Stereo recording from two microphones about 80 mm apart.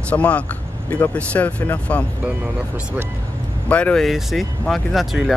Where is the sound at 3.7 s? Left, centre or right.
Centre.